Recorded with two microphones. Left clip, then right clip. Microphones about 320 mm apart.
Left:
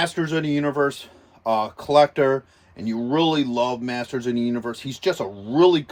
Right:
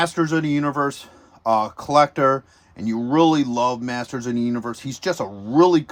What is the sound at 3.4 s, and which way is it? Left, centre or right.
Speech, right.